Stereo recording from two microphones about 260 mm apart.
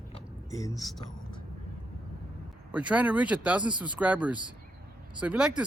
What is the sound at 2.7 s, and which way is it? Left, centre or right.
Speech, centre.